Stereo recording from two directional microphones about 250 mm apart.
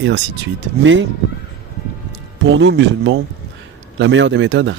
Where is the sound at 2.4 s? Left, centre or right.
Right.